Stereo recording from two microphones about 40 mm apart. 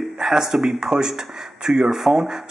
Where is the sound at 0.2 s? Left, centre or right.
Centre.